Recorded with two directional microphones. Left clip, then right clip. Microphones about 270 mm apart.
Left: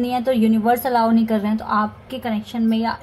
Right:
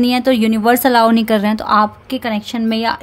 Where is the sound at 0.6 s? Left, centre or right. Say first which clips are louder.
Right 9 dB; right.